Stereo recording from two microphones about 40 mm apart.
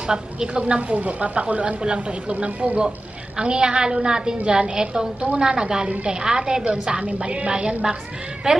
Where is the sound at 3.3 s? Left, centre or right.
Right.